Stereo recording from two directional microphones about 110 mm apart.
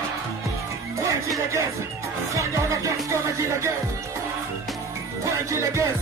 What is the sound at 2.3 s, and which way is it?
Music, 30° right (ahead or behind).